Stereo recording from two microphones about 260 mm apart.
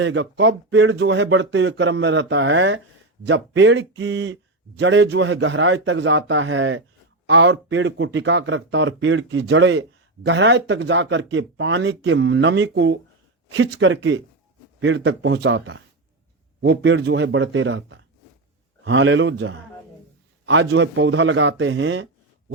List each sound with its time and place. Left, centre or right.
0.0 s speech: right